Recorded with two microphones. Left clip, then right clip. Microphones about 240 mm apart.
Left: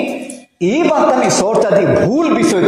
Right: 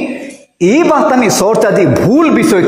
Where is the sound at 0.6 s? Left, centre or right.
Right.